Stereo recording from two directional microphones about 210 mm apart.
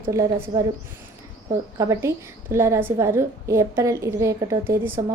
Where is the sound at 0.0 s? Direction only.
15° right (ahead or behind).